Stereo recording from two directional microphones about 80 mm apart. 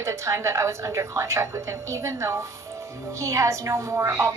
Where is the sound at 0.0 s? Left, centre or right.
Right.